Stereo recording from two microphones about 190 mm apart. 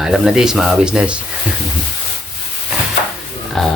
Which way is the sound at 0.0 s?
Centre (ahead or behind).